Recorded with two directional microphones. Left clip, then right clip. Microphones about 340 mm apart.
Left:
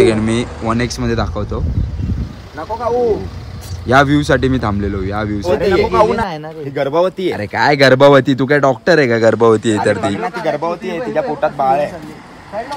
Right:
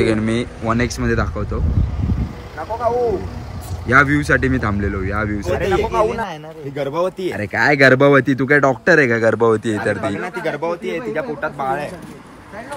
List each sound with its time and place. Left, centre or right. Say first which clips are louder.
0.0 s speech: left 5 dB; centre
3.8 s speech: left 2 dB; centre
5.9 s speech: left 5 dB; left
7.2 s speech: left 3 dB; centre